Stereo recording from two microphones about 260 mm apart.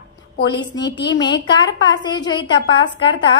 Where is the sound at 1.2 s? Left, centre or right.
Centre.